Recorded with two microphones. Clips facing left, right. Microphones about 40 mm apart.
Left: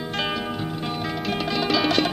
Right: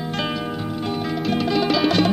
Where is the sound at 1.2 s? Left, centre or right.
Centre.